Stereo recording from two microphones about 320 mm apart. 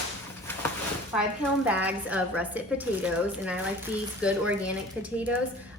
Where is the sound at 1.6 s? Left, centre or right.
Centre.